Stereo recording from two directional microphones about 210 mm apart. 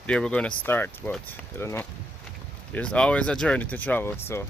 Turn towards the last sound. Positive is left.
turn(degrees=10)  # may be behind; listen again after turning